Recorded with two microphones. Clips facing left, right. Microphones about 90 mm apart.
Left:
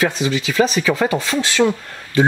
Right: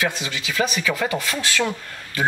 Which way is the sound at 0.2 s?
30° left (ahead or behind).